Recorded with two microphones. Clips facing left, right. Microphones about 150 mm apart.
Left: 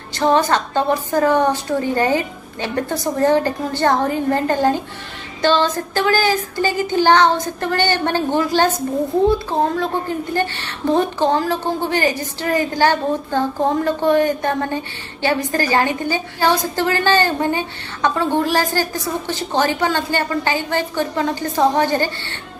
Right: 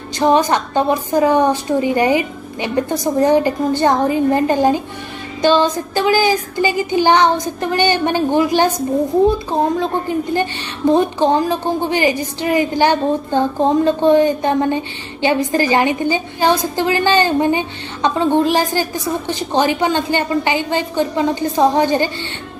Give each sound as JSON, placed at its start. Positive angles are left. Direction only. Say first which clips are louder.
{"t": 0.2, "sound": "a woman's voice", "louder": "right 2 dB", "side_deg": -15}